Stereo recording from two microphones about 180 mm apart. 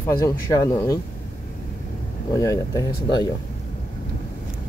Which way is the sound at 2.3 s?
20° left (ahead or behind).